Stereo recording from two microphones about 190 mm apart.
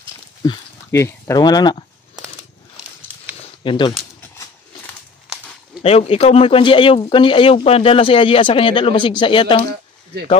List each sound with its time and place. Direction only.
0.4 s speech: 15° left (ahead or behind)
3.6 s speech: 25° left (ahead or behind)
5.8 s speech: 30° left (ahead or behind)